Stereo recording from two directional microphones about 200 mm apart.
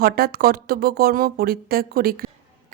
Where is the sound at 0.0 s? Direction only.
50° right (ahead or behind).